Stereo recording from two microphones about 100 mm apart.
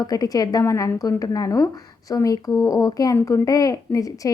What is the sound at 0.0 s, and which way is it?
A woman's voice, 40° left (ahead or behind).